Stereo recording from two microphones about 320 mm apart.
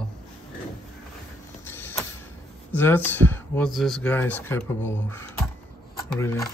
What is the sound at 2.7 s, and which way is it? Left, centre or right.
Speech, centre.